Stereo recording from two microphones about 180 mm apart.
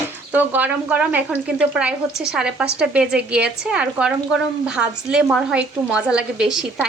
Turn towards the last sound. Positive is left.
turn(degrees=-5)  # may be behind; listen again after turning